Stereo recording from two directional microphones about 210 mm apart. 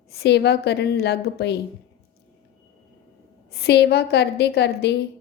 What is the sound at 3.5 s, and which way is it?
A woman's voice, 50° left (ahead or behind).